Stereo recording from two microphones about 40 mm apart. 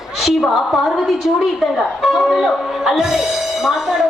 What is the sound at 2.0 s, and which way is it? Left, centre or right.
Speech, centre.